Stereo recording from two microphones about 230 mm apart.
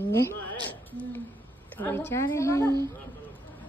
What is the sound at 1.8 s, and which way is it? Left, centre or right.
Speech, centre.